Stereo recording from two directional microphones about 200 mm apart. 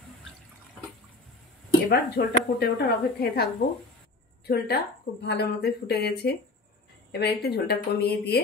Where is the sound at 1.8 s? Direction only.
50° left (ahead or behind).